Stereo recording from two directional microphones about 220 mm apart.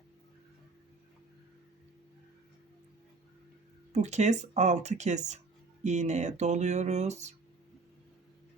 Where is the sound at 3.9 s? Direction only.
30° right (ahead or behind).